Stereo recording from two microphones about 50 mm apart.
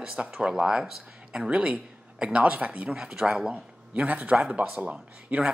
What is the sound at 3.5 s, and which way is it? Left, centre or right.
A man's voice, right.